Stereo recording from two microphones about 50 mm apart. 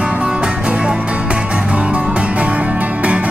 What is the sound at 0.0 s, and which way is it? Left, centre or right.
Music, centre.